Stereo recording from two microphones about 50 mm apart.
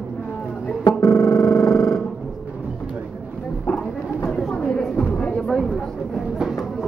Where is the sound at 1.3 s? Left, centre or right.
Centre.